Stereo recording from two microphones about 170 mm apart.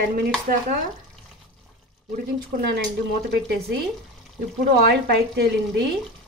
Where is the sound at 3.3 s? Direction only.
70° right (ahead or behind).